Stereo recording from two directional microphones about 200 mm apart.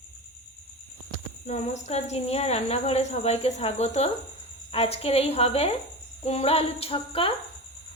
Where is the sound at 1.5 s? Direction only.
35° left (ahead or behind).